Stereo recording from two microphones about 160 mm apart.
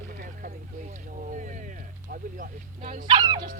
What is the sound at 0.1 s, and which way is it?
Vehicle, 60° right (ahead or behind).